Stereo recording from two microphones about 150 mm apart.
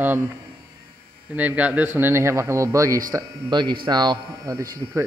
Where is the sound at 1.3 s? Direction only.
10° right (ahead or behind).